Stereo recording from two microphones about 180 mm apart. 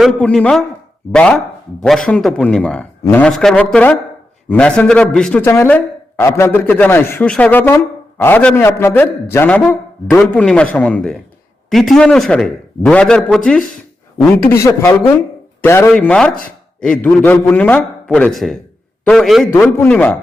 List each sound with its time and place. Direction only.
0.0 s a man's voice: 5° left (ahead or behind)
14.5 s a man's voice: 15° left (ahead or behind)
19.5 s a man's voice: 15° left (ahead or behind)